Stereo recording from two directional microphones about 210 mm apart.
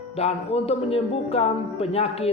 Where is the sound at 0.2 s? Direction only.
30° left (ahead or behind).